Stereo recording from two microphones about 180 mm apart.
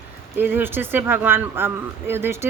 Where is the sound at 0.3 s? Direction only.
10° right (ahead or behind).